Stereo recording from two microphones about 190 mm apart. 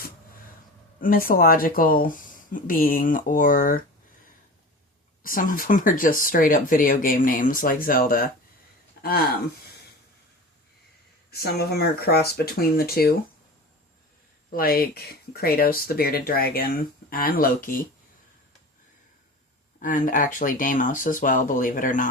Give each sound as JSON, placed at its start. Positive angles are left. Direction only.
{"t": 1.0, "sound": "speech", "side_deg": 50}
{"t": 5.2, "sound": "speech", "side_deg": 45}
{"t": 9.0, "sound": "a sound", "side_deg": 55}
{"t": 11.3, "sound": "speech", "side_deg": 55}
{"t": 14.5, "sound": "speech", "side_deg": 50}
{"t": 19.8, "sound": "speech", "side_deg": 45}